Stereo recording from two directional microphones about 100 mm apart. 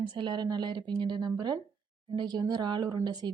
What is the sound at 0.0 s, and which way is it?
Speech, 50° right (ahead or behind).